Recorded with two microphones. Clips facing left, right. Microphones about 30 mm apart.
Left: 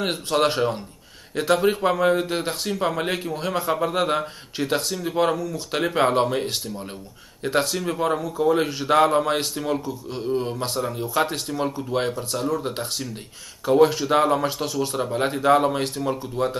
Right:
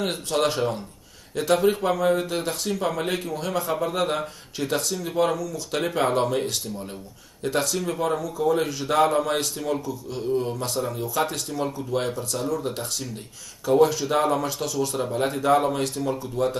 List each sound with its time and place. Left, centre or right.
0.0 s a man's voice: left
14.4 s a man's voice: left